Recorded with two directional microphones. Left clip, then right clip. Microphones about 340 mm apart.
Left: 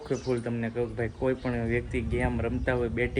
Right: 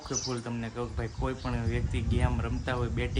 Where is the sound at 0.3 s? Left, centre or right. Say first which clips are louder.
Left 6 dB; centre.